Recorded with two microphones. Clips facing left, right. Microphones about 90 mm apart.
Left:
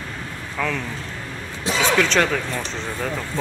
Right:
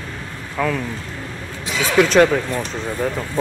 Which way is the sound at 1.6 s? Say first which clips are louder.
Left 2 dB; 35° left (ahead or behind).